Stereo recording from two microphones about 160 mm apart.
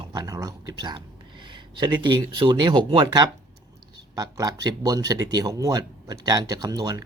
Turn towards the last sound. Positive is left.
turn(degrees=-25)  # may be behind; listen again after turning